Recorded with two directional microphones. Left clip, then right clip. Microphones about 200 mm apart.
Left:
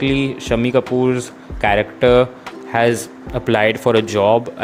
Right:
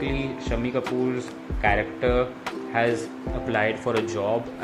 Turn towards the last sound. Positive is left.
turn(degrees=45)  # may be behind; listen again after turning